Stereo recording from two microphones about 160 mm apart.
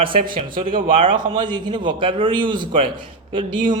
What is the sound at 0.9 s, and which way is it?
A man's voice, 30° right (ahead or behind).